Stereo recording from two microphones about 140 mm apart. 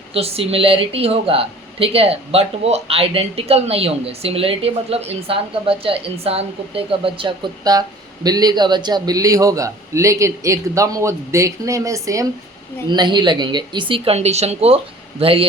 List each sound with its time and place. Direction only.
0.1 s speech: 45° right (ahead or behind)